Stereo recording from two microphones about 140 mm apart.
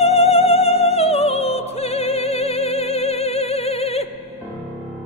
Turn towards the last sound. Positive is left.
turn(degrees=45)  # may be behind; listen again after turning